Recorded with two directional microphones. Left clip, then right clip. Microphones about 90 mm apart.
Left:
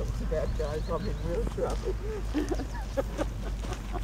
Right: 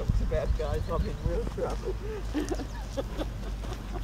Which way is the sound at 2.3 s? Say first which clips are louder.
Left 1 dB; 10° left (ahead or behind).